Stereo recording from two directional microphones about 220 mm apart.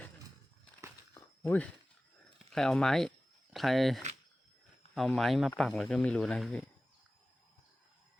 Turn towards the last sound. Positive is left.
turn(degrees=5)  # may be behind; listen again after turning